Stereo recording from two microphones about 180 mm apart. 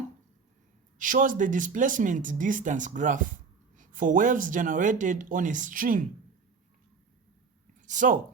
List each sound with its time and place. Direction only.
0.9 s a man's voice: 45° right (ahead or behind)
7.8 s a woman's voice: 45° right (ahead or behind)